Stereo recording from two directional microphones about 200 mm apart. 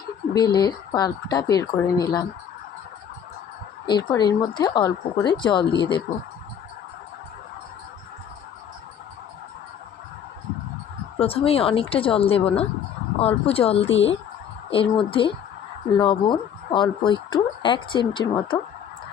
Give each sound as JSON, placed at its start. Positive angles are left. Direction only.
{"t": 0.3, "sound": "speech", "side_deg": 20}
{"t": 3.8, "sound": "speech", "side_deg": 20}
{"t": 11.2, "sound": "speech", "side_deg": 30}